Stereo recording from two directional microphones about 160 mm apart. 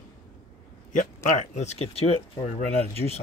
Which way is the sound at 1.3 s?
45° left (ahead or behind).